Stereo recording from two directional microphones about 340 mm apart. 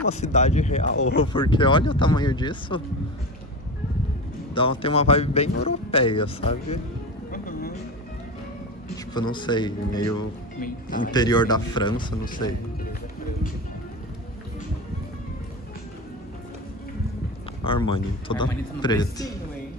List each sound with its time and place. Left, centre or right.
0.1 s speech: centre
0.9 s speech: left
1.3 s speech: centre
4.6 s speech: centre
7.2 s music: left
8.9 s a man's voice: centre
10.6 s speech: left
11.1 s speech: centre
12.3 s speech: left
17.6 s speech: centre